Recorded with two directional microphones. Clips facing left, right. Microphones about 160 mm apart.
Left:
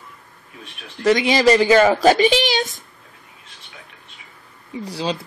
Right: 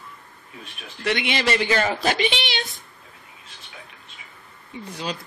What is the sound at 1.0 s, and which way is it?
A woman's voice, 40° left (ahead or behind).